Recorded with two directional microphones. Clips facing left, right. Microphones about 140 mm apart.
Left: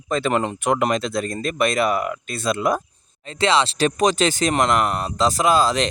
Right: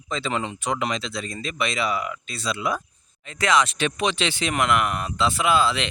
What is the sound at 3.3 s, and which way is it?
Speech, 30° left (ahead or behind).